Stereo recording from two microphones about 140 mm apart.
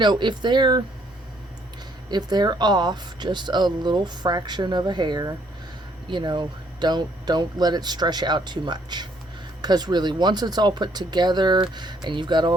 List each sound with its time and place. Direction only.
0.0 s speech: 35° right (ahead or behind)
2.0 s speech: 30° right (ahead or behind)